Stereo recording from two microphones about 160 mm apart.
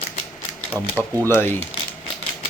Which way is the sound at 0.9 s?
20° right (ahead or behind).